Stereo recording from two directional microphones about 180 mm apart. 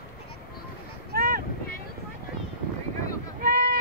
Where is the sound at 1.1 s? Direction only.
55° right (ahead or behind).